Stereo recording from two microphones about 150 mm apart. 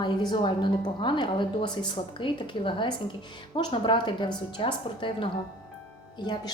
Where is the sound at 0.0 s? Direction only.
30° left (ahead or behind).